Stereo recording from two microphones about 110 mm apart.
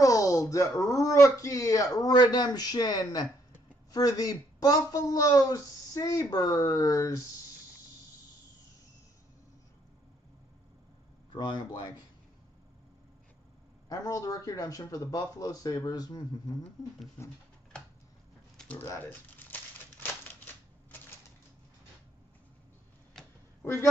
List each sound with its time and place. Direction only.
0.0 s speech: 30° left (ahead or behind)
11.3 s speech: 40° left (ahead or behind)
13.8 s speech: 35° left (ahead or behind)
17.2 s speech: 20° left (ahead or behind)
18.6 s a sound: 10° left (ahead or behind)
18.9 s crumpling: 15° left (ahead or behind)
23.6 s speech: 25° left (ahead or behind)